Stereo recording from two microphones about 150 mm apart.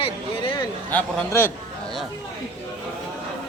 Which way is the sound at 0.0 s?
35° left (ahead or behind).